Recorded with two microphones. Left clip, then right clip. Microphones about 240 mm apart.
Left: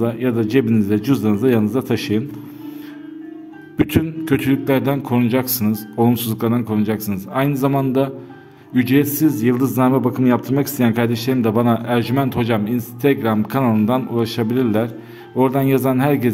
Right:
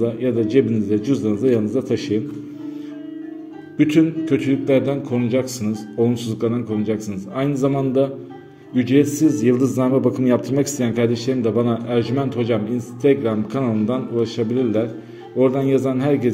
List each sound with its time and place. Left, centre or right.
0.0 s a man's voice: left
3.7 s a man's voice: left